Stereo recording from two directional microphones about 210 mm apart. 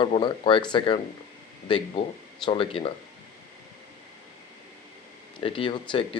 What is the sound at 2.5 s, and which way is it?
Speech, 25° left (ahead or behind).